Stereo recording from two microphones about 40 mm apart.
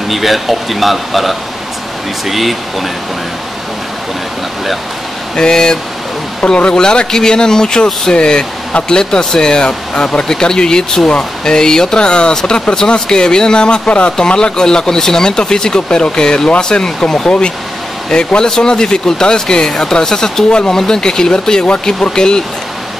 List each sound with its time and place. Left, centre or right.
0.1 s speech: centre
5.3 s speech: centre